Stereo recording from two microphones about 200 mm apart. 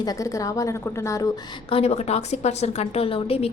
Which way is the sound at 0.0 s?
15° left (ahead or behind).